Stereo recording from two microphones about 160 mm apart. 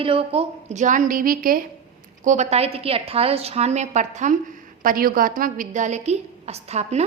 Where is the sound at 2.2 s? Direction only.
45° right (ahead or behind).